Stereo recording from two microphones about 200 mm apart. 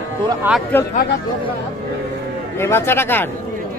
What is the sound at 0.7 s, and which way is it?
Speech, 10° left (ahead or behind).